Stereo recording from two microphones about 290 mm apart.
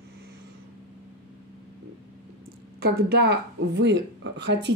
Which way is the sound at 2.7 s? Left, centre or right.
Right.